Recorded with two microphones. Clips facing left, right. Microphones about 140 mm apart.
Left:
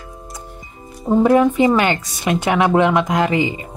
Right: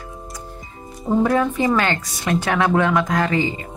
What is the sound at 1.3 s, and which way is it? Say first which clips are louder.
Speech: left 5 dB; 20° left (ahead or behind).